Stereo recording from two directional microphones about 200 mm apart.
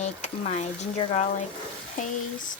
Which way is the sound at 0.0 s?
35° left (ahead or behind).